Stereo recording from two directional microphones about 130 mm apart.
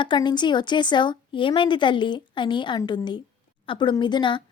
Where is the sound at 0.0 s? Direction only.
35° left (ahead or behind).